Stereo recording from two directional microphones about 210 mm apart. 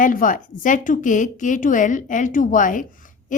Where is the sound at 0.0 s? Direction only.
40° left (ahead or behind).